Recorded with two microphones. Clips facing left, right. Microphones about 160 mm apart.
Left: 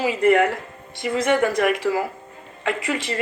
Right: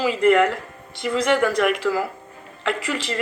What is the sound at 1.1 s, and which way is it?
Speech, 50° left (ahead or behind).